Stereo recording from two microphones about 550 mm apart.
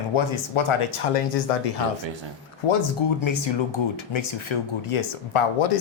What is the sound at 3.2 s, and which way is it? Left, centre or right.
Speech, left.